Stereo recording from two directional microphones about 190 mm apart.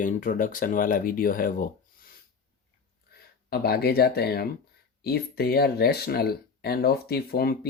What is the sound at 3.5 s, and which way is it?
Speech, 55° left (ahead or behind).